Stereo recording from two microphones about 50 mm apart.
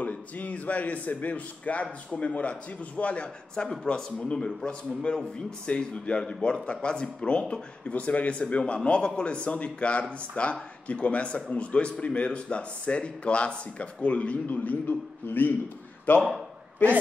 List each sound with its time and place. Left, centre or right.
0.0 s a man's voice: left